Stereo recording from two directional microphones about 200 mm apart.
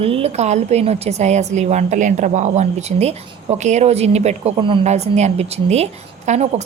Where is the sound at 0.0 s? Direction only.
30° right (ahead or behind).